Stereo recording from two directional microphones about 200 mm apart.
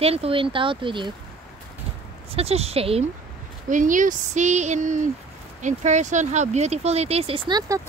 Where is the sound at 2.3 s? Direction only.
30° right (ahead or behind).